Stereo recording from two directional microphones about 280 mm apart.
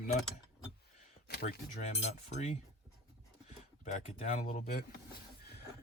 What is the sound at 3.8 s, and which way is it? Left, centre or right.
Cutlery, left.